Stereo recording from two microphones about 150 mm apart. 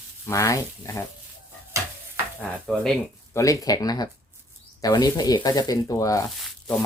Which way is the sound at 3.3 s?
20° left (ahead or behind).